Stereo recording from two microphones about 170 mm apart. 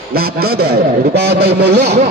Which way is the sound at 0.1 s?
65° right (ahead or behind).